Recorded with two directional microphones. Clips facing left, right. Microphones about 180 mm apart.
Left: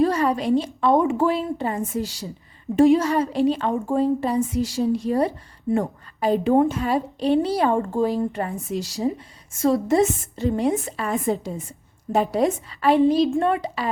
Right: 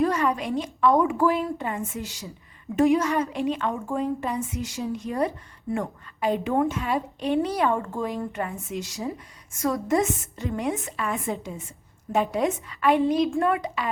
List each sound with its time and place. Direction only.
0.0 s a woman's voice: 35° left (ahead or behind)